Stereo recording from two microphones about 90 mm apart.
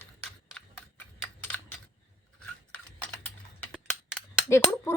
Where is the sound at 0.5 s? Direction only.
20° left (ahead or behind).